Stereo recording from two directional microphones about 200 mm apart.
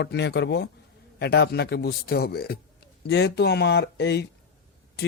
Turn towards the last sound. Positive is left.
turn(degrees=55)  # may be behind; listen again after turning